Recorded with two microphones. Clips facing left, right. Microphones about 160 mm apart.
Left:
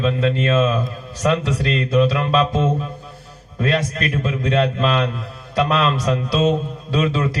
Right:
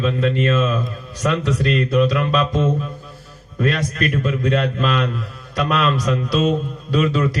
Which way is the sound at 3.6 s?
30° left (ahead or behind).